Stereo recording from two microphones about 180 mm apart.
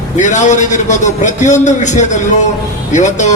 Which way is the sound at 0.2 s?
40° left (ahead or behind).